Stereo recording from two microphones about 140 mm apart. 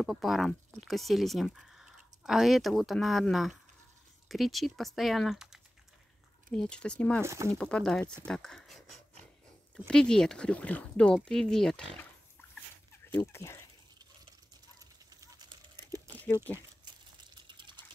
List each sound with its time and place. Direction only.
0.0 s speech: centre (ahead or behind)
7.2 s speech: 20° right (ahead or behind)
7.5 s speech: 5° left (ahead or behind)
13.2 s speech: 20° left (ahead or behind)
16.8 s a sound: 30° right (ahead or behind)